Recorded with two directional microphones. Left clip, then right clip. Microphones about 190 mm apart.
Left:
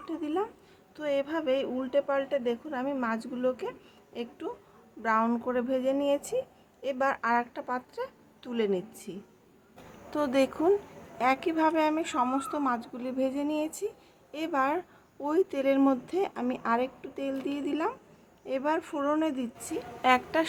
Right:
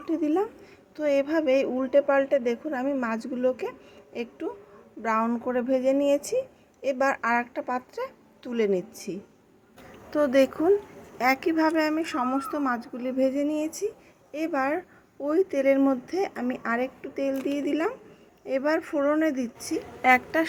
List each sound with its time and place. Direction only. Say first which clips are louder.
0.0 s a woman's voice: right 6 dB; 15° right (ahead or behind)
10.1 s a woman's voice: right 6 dB; 10° right (ahead or behind)